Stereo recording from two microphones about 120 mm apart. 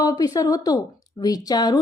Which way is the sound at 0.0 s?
30° left (ahead or behind).